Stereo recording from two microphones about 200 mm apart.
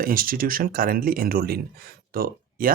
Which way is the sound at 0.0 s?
45° right (ahead or behind).